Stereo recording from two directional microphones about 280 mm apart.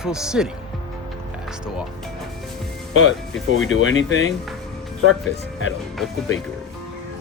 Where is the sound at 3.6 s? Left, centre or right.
Left.